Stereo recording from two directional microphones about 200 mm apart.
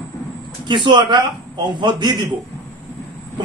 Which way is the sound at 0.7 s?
20° right (ahead or behind).